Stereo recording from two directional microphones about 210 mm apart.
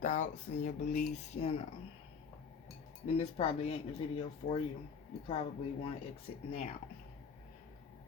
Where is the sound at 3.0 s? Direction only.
30° left (ahead or behind).